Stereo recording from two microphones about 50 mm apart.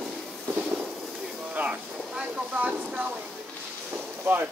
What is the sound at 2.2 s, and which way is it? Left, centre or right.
Speech, right.